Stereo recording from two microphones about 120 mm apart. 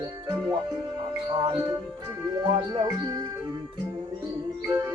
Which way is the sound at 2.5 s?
35° right (ahead or behind).